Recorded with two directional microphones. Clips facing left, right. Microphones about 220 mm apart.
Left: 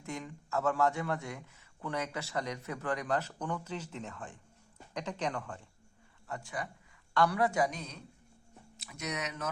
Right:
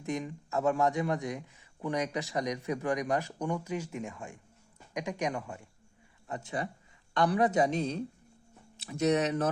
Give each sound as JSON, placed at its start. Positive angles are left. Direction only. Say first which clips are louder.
{"t": 0.0, "sound": "a man's voice", "louder": "right 7 dB", "side_deg": -15}
{"t": 6.2, "sound": "speech", "louder": "right 4 dB", "side_deg": -20}